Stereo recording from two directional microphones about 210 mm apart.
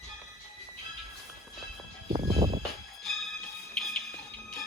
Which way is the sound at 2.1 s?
25° right (ahead or behind).